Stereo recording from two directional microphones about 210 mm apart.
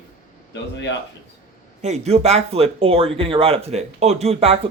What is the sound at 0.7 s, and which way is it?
Speech, 55° left (ahead or behind).